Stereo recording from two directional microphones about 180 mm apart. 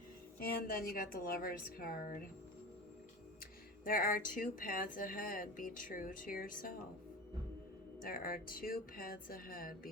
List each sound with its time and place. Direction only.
0.3 s a woman's voice: 55° left (ahead or behind)
3.8 s speech: 50° left (ahead or behind)
8.0 s speech: 50° left (ahead or behind)